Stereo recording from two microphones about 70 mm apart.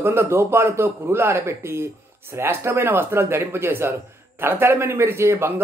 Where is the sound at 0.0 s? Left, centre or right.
Right.